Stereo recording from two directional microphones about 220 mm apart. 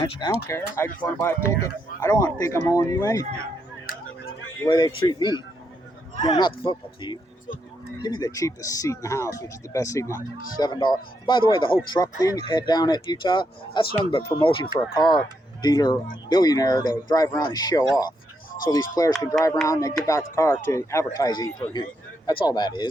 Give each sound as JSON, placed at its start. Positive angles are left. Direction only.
{"t": 0.0, "sound": "speech", "side_deg": 25}
{"t": 0.3, "sound": "speech", "side_deg": 10}
{"t": 4.6, "sound": "speech", "side_deg": 20}